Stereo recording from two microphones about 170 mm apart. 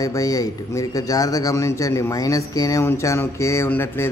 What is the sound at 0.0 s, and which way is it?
A man's voice, 20° left (ahead or behind).